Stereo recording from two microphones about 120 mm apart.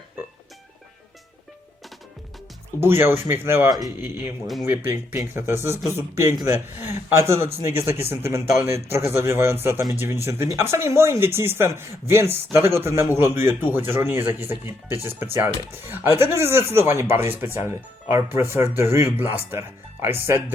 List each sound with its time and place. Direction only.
2.8 s speech: 20° right (ahead or behind)
3.7 s speech: 35° right (ahead or behind)
4.0 s speech: 20° right (ahead or behind)